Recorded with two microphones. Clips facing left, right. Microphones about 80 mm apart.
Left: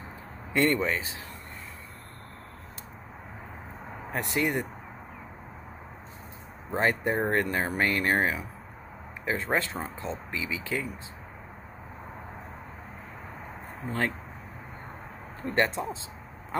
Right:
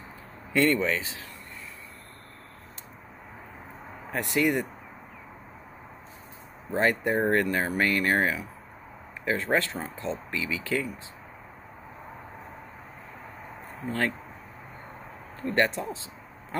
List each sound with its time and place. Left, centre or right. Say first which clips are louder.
0.5 s speech: right 1 dB; left
4.1 s speech: right 3 dB; left
6.7 s speech: right 2 dB; left
13.8 s speech: right 1 dB; left
15.4 s speech: right 1 dB; left